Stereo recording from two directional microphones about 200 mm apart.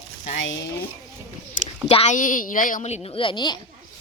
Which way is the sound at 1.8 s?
30° left (ahead or behind).